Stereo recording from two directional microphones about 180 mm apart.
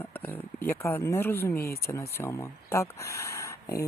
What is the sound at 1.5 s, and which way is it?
Speech, 55° left (ahead or behind).